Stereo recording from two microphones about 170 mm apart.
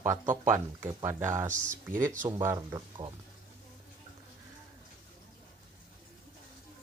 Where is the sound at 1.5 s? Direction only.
50° right (ahead or behind).